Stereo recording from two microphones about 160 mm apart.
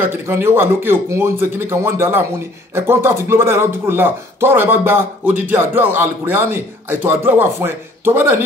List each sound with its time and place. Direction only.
0.0 s speech: 15° right (ahead or behind)